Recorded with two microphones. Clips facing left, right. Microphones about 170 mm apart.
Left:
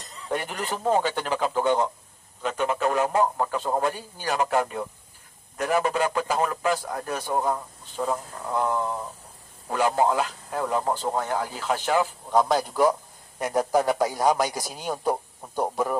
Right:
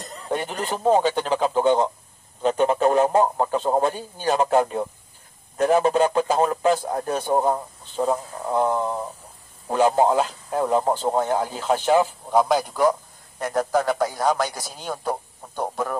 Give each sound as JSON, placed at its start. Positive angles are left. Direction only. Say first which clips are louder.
{"t": 0.3, "sound": "a man's voice", "louder": "right 3 dB", "side_deg": -25}
{"t": 12.3, "sound": "speech", "louder": "left 1 dB", "side_deg": -5}
{"t": 13.4, "sound": "a man's voice", "louder": "right 1 dB", "side_deg": 15}